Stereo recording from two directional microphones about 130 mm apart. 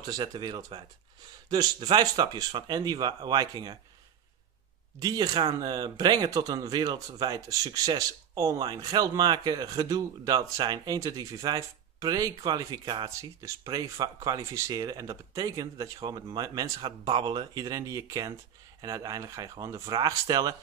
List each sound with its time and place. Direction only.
0.0 s speech: 35° right (ahead or behind)
5.0 s speech: 30° right (ahead or behind)
16.8 s speech: 35° right (ahead or behind)